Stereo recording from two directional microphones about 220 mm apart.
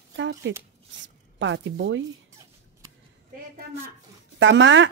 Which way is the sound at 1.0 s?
55° right (ahead or behind).